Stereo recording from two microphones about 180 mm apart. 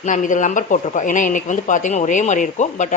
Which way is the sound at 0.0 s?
45° left (ahead or behind).